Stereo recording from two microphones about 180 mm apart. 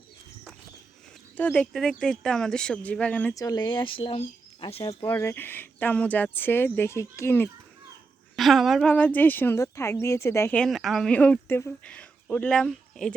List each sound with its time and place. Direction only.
1.4 s speech: 10° left (ahead or behind)
3.3 s speech: 20° left (ahead or behind)
8.4 s speech: centre (ahead or behind)